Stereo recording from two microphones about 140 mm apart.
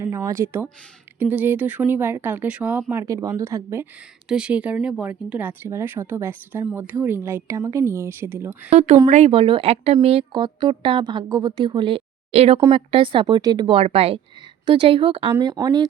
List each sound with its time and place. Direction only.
0.0 s speech: 20° right (ahead or behind)
2.9 s speech: 20° right (ahead or behind)
4.3 s speech: 5° right (ahead or behind)
9.0 s speech: 55° right (ahead or behind)
9.3 s speech: 40° right (ahead or behind)